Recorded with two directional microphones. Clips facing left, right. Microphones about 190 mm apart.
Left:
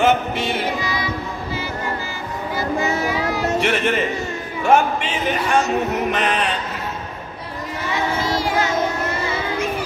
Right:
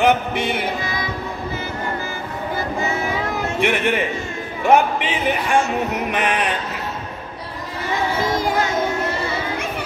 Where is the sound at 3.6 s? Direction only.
15° right (ahead or behind).